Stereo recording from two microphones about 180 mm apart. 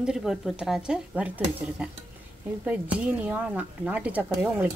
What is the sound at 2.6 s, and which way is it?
Speech, 10° right (ahead or behind).